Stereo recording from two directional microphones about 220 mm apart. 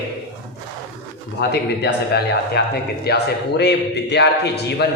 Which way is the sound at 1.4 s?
50° left (ahead or behind).